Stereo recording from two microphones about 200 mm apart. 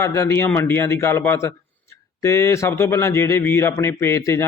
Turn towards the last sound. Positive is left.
turn(degrees=15)  # may be behind; listen again after turning